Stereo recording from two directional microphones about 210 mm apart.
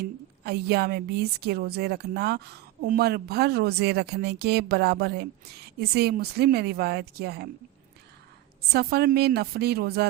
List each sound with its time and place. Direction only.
0.0 s a woman's voice: 50° right (ahead or behind)
8.7 s a woman's voice: 50° right (ahead or behind)